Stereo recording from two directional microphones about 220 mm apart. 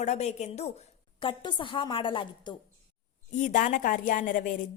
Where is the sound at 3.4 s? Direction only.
35° left (ahead or behind).